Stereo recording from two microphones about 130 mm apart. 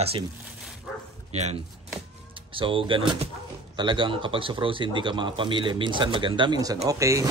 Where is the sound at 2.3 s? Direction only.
40° right (ahead or behind); by 7.2 s 25° right (ahead or behind).